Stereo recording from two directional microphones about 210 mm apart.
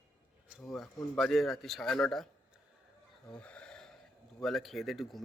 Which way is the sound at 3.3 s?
5° left (ahead or behind).